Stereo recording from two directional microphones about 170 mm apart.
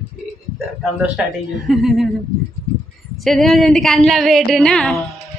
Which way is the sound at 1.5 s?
Centre (ahead or behind).